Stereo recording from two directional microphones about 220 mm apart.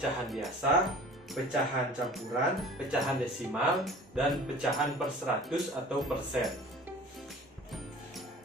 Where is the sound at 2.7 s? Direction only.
Centre (ahead or behind).